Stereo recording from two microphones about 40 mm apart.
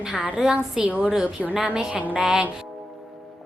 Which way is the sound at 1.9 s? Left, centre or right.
Right.